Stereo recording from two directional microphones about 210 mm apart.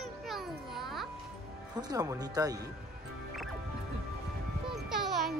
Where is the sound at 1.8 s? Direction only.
15° right (ahead or behind).